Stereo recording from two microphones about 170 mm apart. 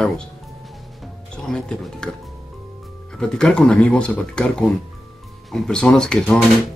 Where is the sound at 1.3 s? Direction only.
5° left (ahead or behind).